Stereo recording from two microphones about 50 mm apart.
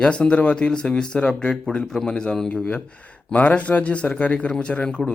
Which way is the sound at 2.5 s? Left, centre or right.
Left.